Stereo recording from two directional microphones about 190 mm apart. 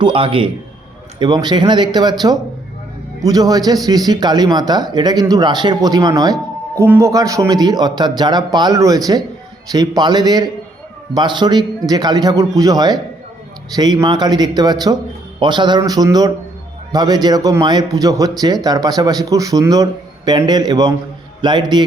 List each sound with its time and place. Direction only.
0.0 s a man's voice: 25° right (ahead or behind)